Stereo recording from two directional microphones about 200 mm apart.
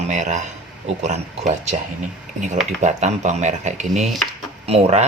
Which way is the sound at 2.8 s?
35° right (ahead or behind).